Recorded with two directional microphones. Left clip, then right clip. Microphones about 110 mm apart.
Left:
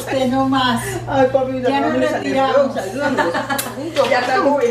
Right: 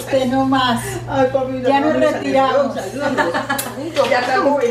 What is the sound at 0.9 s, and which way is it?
Speech, 15° left (ahead or behind).